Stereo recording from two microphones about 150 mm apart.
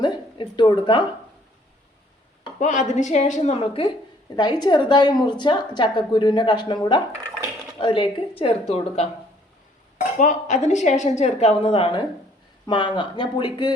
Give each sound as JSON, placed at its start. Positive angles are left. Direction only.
{"t": 0.0, "sound": "a sound", "side_deg": 30}
{"t": 2.6, "sound": "a woman's voice", "side_deg": 55}
{"t": 10.0, "sound": "a woman's voice", "side_deg": 55}